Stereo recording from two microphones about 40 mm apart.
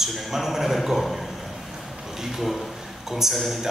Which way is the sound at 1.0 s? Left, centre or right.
Centre.